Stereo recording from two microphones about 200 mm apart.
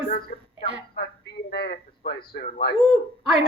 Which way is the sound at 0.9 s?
55° left (ahead or behind).